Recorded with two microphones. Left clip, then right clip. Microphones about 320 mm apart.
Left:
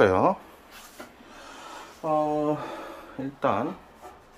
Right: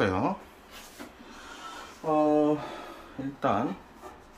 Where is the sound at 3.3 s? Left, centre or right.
Centre.